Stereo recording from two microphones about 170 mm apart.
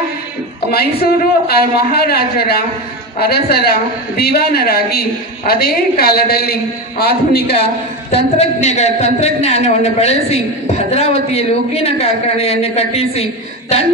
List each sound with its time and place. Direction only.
0.7 s a woman's voice: 65° left (ahead or behind)
7.6 s a woman's voice: 40° left (ahead or behind)